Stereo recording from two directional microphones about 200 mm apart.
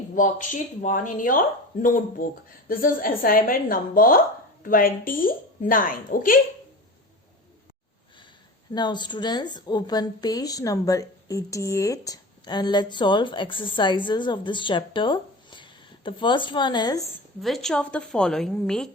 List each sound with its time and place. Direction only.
0.1 s speech: 40° left (ahead or behind)
8.7 s a woman's voice: 20° left (ahead or behind)
17.4 s a woman's voice: centre (ahead or behind)